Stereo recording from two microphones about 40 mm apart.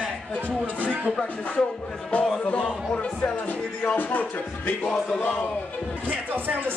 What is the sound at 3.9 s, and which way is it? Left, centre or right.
Music, left.